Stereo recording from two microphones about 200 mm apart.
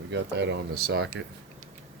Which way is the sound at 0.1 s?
65° right (ahead or behind).